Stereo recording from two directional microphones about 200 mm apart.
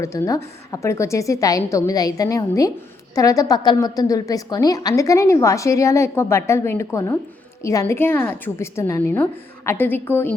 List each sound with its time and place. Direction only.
0.0 s a woman's voice: 15° left (ahead or behind)